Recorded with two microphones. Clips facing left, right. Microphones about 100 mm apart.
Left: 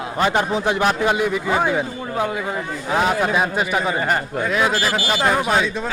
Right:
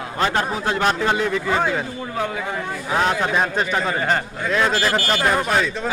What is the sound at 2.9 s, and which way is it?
Speech, 5° left (ahead or behind).